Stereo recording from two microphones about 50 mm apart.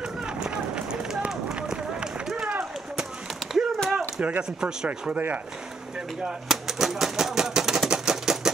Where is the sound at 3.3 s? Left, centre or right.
Centre.